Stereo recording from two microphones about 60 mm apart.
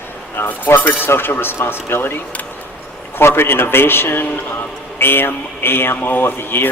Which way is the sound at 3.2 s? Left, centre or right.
Left.